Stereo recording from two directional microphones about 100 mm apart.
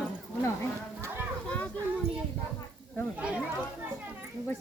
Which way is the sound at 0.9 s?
30° right (ahead or behind).